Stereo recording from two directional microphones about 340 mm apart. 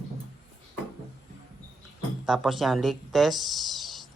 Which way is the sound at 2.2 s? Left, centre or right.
Centre.